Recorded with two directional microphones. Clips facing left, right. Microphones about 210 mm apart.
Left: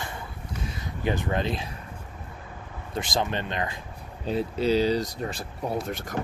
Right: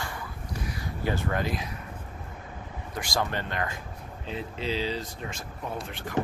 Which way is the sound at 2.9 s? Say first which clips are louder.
Left 2 dB; 20° left (ahead or behind).